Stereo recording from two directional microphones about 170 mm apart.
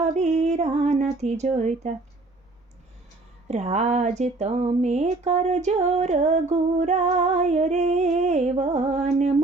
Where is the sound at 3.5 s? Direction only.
40° right (ahead or behind).